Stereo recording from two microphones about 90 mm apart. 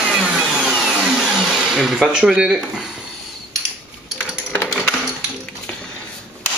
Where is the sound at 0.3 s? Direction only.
5° right (ahead or behind).